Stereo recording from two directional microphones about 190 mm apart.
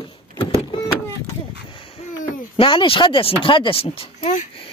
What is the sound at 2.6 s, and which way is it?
Speech, 25° left (ahead or behind).